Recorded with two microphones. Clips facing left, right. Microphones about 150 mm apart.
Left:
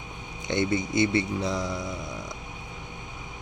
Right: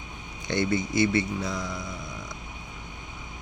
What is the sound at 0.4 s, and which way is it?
Speech, 20° left (ahead or behind).